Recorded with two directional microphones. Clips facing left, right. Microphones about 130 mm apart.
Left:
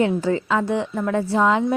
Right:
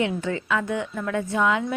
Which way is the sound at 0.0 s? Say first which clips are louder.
Left 6 dB; 30° left (ahead or behind).